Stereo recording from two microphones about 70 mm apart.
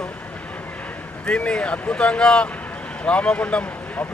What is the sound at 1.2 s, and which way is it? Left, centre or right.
Speech, centre.